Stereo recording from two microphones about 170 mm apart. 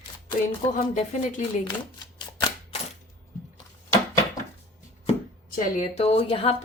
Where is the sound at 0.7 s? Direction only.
45° left (ahead or behind).